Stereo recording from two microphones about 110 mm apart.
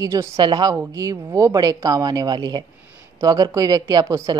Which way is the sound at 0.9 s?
30° right (ahead or behind).